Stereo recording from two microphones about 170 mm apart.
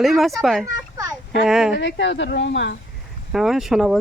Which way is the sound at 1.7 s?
90° left.